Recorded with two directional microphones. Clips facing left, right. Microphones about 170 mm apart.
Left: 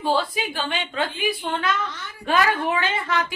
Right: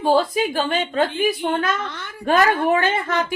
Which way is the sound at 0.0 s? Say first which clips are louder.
Right 5 dB; 45° right (ahead or behind).